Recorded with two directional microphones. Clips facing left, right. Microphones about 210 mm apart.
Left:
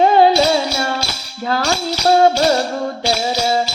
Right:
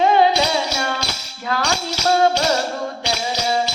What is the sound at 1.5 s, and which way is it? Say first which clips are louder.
Speech: left 4 dB; 35° left (ahead or behind).